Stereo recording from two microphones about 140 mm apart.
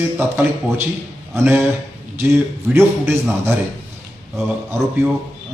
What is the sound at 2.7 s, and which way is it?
Speech, 15° right (ahead or behind).